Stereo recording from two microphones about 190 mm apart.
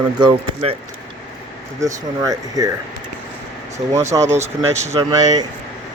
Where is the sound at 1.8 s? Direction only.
20° right (ahead or behind).